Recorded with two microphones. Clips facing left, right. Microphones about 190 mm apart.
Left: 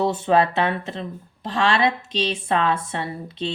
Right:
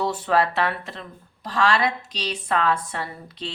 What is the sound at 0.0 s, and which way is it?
A woman's voice, 25° left (ahead or behind).